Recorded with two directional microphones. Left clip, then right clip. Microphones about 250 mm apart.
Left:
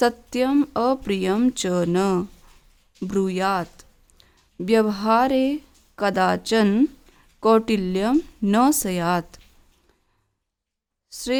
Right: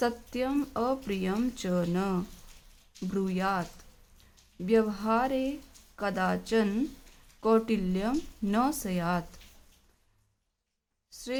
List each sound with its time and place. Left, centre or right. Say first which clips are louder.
0.0 s speech: left 9 dB; left
11.1 s speech: left 11 dB; left